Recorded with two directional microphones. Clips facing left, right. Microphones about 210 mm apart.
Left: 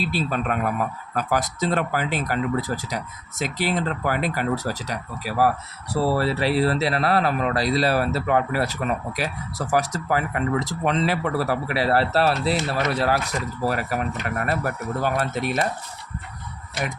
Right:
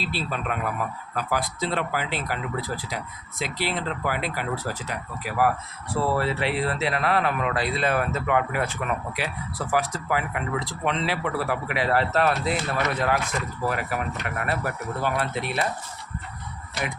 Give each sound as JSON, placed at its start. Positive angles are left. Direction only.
{"t": 0.0, "sound": "a man's voice", "side_deg": 45}